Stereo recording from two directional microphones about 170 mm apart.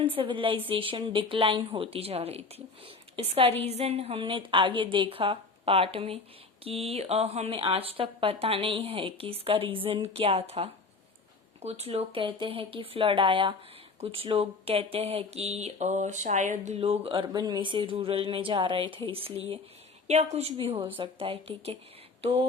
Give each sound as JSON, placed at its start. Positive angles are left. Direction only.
{"t": 0.0, "sound": "speech", "side_deg": -30}